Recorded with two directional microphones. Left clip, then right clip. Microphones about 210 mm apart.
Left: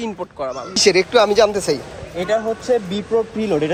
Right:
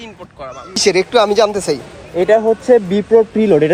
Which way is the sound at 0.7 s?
5° left (ahead or behind).